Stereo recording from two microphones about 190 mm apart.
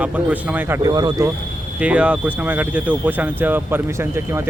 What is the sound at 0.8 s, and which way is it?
Speech, 20° right (ahead or behind).